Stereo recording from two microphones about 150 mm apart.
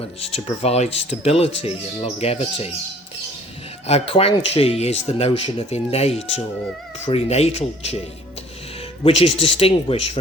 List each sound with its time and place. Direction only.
0.0 s speech: 40° left (ahead or behind)
3.8 s speech: 40° left (ahead or behind)
9.0 s speech: 40° left (ahead or behind)